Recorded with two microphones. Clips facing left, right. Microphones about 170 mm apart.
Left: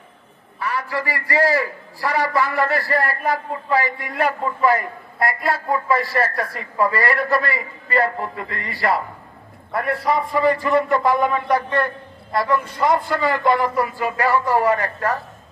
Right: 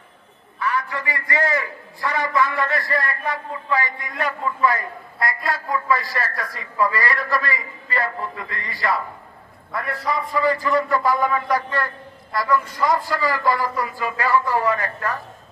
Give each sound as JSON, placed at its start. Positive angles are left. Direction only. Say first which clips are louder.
{"t": 0.6, "sound": "a man's voice", "louder": "left 1 dB", "side_deg": 35}